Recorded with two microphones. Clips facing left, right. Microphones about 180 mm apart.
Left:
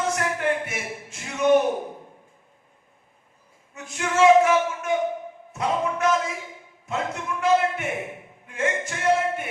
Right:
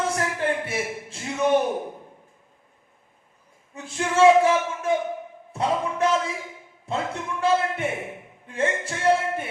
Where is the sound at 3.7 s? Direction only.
30° right (ahead or behind).